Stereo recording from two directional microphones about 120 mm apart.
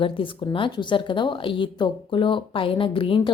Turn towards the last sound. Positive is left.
turn(degrees=45)  # may be behind; listen again after turning